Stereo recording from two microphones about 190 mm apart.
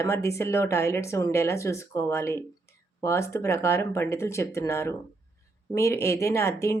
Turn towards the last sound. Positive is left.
turn(degrees=15)  # may be behind; listen again after turning